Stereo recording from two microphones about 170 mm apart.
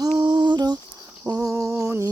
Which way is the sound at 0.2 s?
25° right (ahead or behind).